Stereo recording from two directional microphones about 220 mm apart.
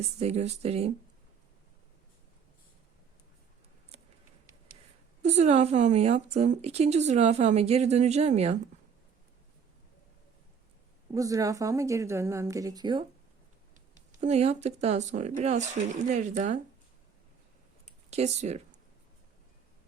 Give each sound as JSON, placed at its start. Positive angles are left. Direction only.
{"t": 0.2, "sound": "a woman's voice", "side_deg": -30}
{"t": 5.2, "sound": "a woman's voice", "side_deg": -30}
{"t": 11.1, "sound": "speech", "side_deg": -15}
{"t": 14.2, "sound": "speech", "side_deg": -30}
{"t": 18.1, "sound": "speech", "side_deg": -30}